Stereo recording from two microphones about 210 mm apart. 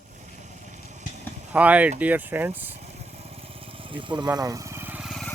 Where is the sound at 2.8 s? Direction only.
25° right (ahead or behind); by 5.3 s centre (ahead or behind).